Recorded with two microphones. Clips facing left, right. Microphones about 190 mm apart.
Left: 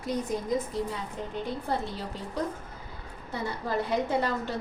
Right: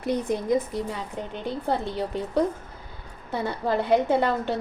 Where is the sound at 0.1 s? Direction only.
30° right (ahead or behind).